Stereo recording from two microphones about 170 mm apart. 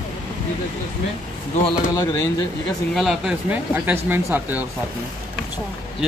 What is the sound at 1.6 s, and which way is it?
Speech, 20° left (ahead or behind).